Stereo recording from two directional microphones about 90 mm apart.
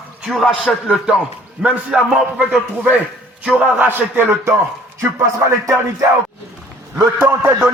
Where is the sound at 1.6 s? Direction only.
10° right (ahead or behind).